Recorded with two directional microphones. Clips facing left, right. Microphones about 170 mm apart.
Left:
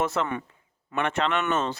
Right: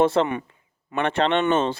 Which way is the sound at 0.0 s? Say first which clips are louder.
Right 7 dB; 30° right (ahead or behind).